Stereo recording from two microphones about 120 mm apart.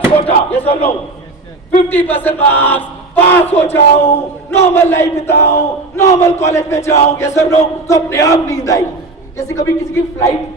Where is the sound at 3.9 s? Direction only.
55° left (ahead or behind).